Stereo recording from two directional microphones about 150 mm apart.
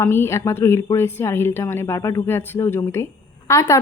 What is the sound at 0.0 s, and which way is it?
Speech, 15° left (ahead or behind).